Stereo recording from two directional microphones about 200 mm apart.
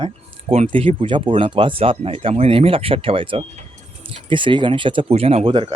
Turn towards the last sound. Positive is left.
turn(degrees=-25)  # may be behind; listen again after turning